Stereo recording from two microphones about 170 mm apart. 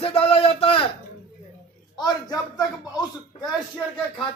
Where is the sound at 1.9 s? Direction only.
25° left (ahead or behind).